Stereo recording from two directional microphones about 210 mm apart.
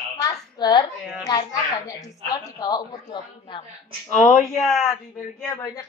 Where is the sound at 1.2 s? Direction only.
15° left (ahead or behind).